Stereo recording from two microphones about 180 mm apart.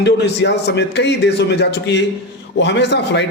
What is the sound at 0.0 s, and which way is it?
A man's voice, 70° left (ahead or behind).